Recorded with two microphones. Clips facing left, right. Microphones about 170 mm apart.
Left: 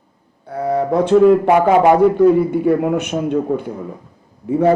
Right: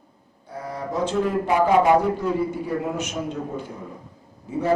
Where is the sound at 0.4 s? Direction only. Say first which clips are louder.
Left 13 dB; 60° left (ahead or behind).